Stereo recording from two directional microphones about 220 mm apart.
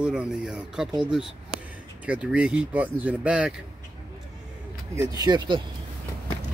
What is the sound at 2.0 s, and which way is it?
Speech, 5° right (ahead or behind).